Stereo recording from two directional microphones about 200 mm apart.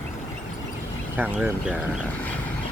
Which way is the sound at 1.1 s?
5° right (ahead or behind).